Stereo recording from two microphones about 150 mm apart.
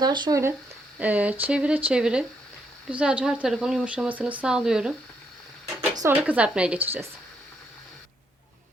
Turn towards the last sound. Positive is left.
turn(degrees=-15)  # may be behind; listen again after turning